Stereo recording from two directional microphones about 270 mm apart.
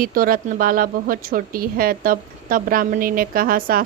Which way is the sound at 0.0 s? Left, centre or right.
Right.